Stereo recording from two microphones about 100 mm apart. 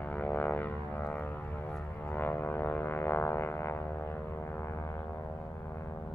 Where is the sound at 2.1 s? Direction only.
20° left (ahead or behind).